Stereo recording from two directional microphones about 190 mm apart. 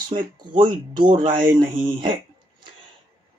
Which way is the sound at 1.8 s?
25° right (ahead or behind).